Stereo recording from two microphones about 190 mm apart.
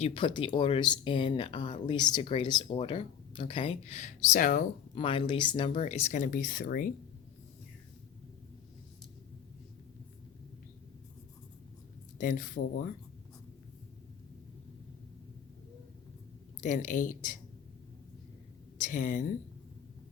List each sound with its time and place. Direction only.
0.0 s speech: 25° left (ahead or behind); by 4.6 s 45° left (ahead or behind)
4.9 s speech: 25° left (ahead or behind); by 6.9 s 50° left (ahead or behind)
12.1 s speech: 45° left (ahead or behind)
16.6 s speech: 40° left (ahead or behind)
18.8 s speech: 45° left (ahead or behind)